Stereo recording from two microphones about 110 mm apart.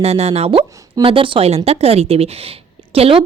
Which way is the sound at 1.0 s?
55° right (ahead or behind).